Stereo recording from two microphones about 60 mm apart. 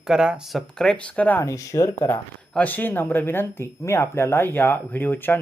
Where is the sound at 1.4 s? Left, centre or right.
Left.